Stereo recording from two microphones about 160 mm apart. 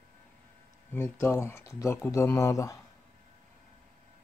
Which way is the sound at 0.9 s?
15° left (ahead or behind).